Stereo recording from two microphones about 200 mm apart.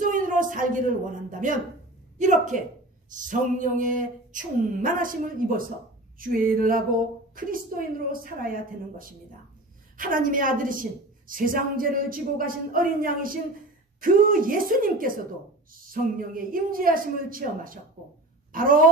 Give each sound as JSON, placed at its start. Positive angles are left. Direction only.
{"t": 0.0, "sound": "a woman's voice", "side_deg": -40}